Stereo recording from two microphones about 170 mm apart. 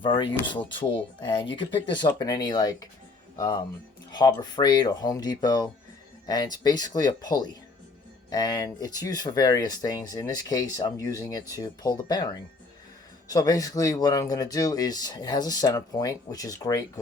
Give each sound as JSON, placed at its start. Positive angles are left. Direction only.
{"t": 0.0, "sound": "speech", "side_deg": 30}